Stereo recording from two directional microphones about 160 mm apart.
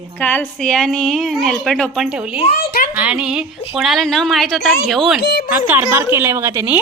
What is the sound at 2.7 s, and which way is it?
Speech, 70° left (ahead or behind).